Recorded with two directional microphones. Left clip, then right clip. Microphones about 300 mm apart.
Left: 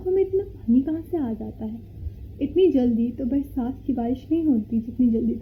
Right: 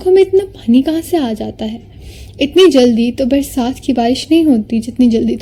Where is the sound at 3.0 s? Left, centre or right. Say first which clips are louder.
Right 12 dB; right.